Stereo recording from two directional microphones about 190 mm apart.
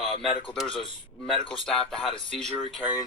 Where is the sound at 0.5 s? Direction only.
Centre (ahead or behind).